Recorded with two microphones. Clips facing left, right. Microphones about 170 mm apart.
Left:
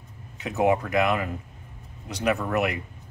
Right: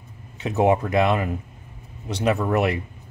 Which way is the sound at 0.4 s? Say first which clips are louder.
Right 3 dB; 25° right (ahead or behind).